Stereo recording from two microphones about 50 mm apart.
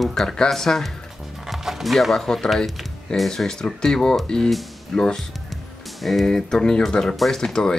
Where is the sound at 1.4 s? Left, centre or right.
Centre.